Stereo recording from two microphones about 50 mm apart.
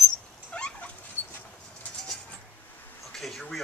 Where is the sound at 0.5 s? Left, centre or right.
Left.